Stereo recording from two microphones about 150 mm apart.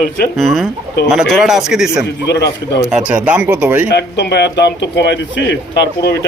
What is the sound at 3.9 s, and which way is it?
Speech, 90° left.